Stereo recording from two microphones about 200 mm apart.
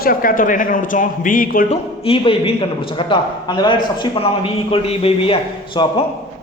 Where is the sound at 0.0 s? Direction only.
45° left (ahead or behind).